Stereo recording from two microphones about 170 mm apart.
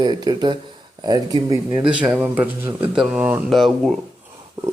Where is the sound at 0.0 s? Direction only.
25° right (ahead or behind).